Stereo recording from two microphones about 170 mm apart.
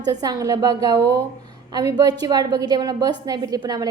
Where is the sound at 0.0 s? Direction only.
20° right (ahead or behind).